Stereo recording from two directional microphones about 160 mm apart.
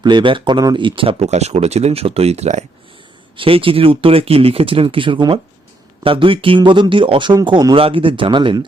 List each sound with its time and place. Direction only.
0.0 s speech: 30° right (ahead or behind)
3.3 s speech: 35° right (ahead or behind)